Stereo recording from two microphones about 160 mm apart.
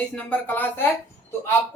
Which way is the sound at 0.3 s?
10° left (ahead or behind).